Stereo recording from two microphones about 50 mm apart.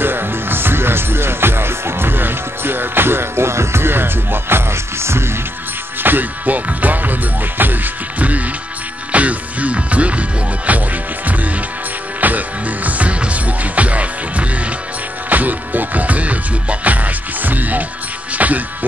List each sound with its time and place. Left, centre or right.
0.0 s music: right
6.0 s music: right